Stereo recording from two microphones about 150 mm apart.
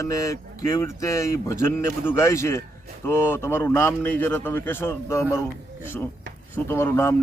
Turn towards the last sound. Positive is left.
turn(degrees=15)  # may be behind; listen again after turning